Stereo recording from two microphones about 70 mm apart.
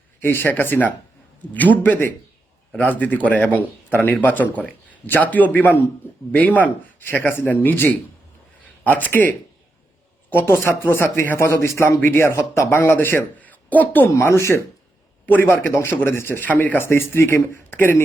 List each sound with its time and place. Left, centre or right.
0.2 s a man's voice: left
11.9 s a man's voice: left
14.1 s speech: left
15.3 s speech: left